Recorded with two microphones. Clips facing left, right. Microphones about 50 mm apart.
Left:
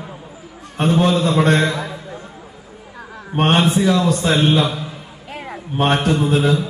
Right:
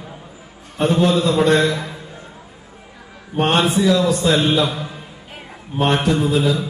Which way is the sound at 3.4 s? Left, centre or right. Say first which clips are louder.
Left 1 dB; left.